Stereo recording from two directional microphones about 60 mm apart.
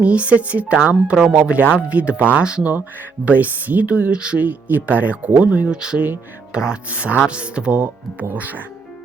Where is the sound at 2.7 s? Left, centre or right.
Right.